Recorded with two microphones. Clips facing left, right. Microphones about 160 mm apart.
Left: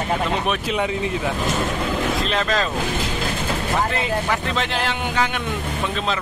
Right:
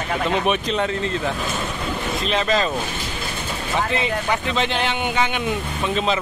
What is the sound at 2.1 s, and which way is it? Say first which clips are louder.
Speech: right 1 dB; centre (ahead or behind).